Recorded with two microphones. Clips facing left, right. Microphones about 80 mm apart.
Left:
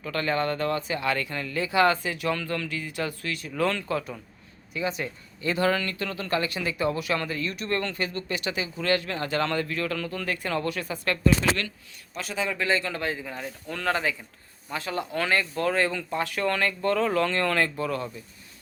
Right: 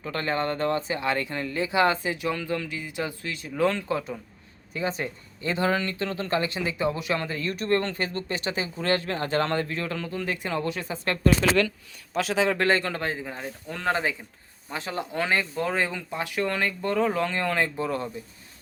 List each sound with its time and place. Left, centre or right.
0.0 s speech: right
4.7 s speech: right
12.1 s a man's voice: right
12.5 s speech: right